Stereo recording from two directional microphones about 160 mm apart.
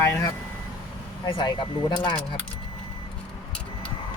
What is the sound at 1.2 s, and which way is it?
Speech, 30° left (ahead or behind).